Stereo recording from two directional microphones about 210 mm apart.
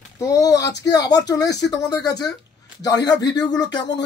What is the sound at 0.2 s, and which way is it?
Speech, 15° left (ahead or behind).